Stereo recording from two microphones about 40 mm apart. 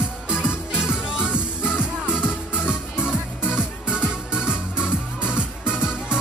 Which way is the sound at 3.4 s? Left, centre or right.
Right.